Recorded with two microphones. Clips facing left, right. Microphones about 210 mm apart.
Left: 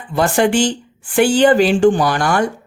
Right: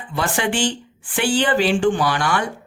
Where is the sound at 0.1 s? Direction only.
40° left (ahead or behind).